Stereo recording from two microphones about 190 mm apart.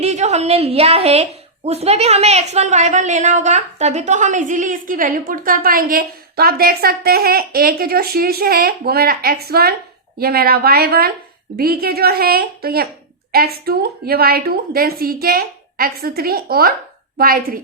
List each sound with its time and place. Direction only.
0.0 s a woman's voice: 35° right (ahead or behind)